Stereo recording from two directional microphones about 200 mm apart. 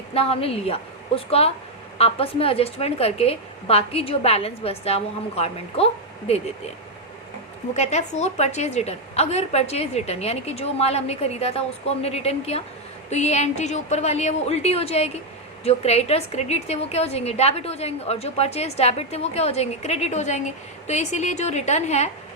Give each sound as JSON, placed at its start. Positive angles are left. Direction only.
{"t": 0.1, "sound": "a woman's voice", "side_deg": 30}
{"t": 7.7, "sound": "a woman's voice", "side_deg": 35}